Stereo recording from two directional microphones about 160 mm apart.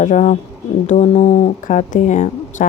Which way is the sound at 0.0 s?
50° left (ahead or behind).